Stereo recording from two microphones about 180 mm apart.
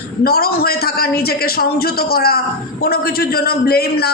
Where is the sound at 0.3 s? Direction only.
55° left (ahead or behind).